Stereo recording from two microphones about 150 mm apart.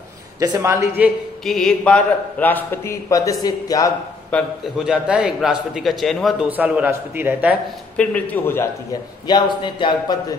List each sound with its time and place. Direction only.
0.4 s speech: 25° right (ahead or behind)
1.4 s a man's voice: centre (ahead or behind); by 3.9 s 25° left (ahead or behind)
4.3 s speech: 5° left (ahead or behind)
4.8 s speech: 5° right (ahead or behind)
6.5 s a man's voice: 10° right (ahead or behind)
8.0 s a man's voice: 10° left (ahead or behind)
9.3 s a man's voice: 30° left (ahead or behind)